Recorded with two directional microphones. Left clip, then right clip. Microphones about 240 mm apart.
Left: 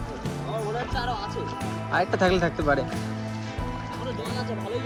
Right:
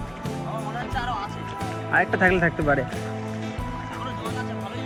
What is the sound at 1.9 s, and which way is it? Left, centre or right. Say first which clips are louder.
Speech: right 3 dB; centre.